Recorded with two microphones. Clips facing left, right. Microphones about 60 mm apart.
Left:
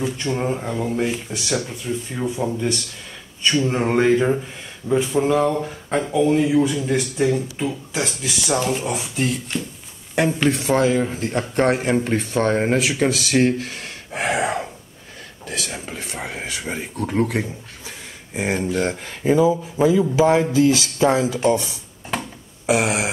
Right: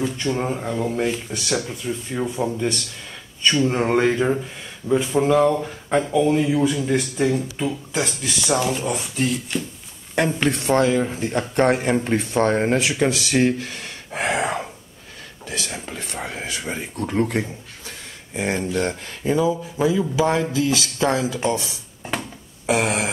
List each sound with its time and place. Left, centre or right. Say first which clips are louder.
0.0 s speech: even; centre
15.4 s whispering: left 1 dB; centre
15.7 s speech: even; centre
22.7 s speech: left 1 dB; centre